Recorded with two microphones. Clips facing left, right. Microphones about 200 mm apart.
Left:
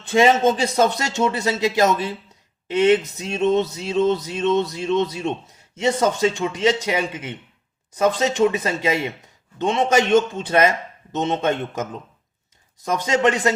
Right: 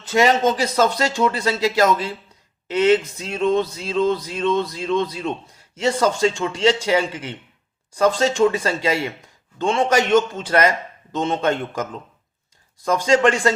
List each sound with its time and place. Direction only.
0.1 s speech: 25° left (ahead or behind)
12.8 s speech: 20° left (ahead or behind)